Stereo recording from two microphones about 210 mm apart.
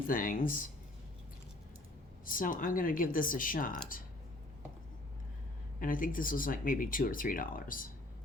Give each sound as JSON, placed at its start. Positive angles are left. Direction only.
{"t": 0.1, "sound": "speech", "side_deg": 40}
{"t": 2.2, "sound": "speech", "side_deg": 40}
{"t": 5.8, "sound": "speech", "side_deg": 40}